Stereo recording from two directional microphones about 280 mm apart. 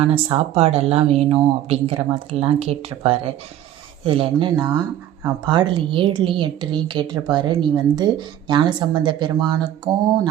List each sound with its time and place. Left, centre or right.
0.0 s a woman's voice: right